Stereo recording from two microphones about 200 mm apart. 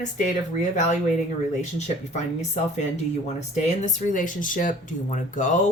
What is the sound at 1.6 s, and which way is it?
Speech, 35° left (ahead or behind).